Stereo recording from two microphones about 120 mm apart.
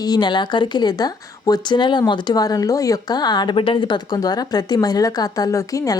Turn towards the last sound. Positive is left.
turn(degrees=25)  # may be behind; listen again after turning